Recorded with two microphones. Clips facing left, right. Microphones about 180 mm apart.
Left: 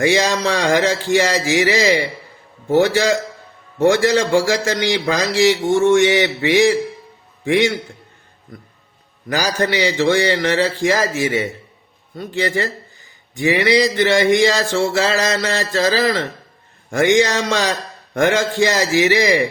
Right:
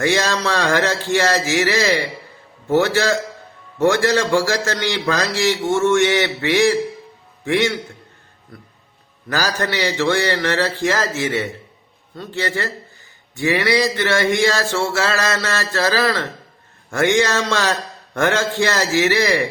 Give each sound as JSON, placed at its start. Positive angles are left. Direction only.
{"t": 0.0, "sound": "a man's voice", "side_deg": 15}
{"t": 9.3, "sound": "a man's voice", "side_deg": 15}